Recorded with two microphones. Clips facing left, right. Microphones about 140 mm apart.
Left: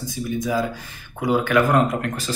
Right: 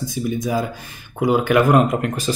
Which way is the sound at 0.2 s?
20° right (ahead or behind).